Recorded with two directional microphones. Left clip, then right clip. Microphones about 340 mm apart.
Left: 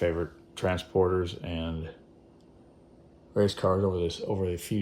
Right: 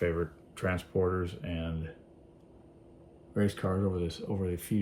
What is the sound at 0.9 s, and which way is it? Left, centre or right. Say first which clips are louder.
Speech: left 5 dB; left.